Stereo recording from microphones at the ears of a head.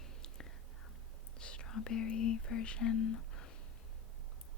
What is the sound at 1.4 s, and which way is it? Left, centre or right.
Speech, left.